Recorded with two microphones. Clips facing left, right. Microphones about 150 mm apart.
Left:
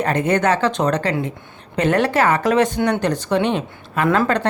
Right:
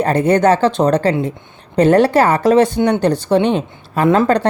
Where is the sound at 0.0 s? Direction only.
35° right (ahead or behind).